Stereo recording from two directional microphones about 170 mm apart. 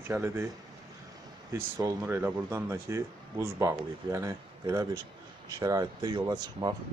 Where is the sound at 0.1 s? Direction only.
15° right (ahead or behind).